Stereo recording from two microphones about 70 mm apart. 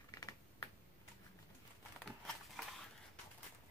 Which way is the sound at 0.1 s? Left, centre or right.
Left.